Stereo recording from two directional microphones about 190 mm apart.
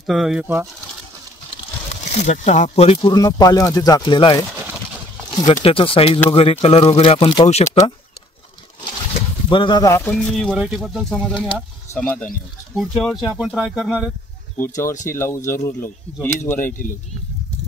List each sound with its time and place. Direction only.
0.0 s speech: centre (ahead or behind)
1.9 s speech: 35° left (ahead or behind)
9.5 s speech: 25° left (ahead or behind); by 14.1 s 5° right (ahead or behind)
14.6 s speech: 15° left (ahead or behind)
16.5 s speech: 45° left (ahead or behind)